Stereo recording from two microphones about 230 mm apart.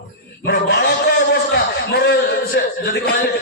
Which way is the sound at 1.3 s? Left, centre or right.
Left.